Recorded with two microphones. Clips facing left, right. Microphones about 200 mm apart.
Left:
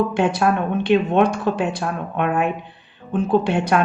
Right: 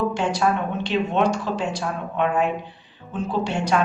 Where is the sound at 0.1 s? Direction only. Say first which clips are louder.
Left 3 dB; 55° left (ahead or behind).